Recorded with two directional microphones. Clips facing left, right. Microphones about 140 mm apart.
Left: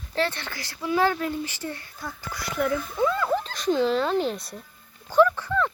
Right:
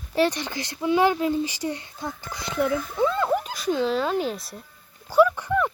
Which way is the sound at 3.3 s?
10° right (ahead or behind).